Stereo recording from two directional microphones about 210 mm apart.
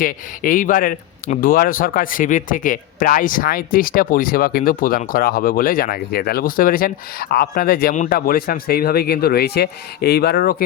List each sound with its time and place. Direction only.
0.0 s speech: 40° left (ahead or behind)